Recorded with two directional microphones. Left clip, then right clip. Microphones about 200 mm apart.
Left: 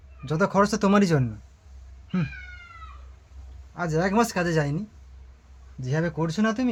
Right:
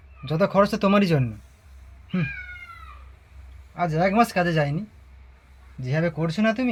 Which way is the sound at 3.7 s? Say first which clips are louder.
Right 3 dB; 10° left (ahead or behind).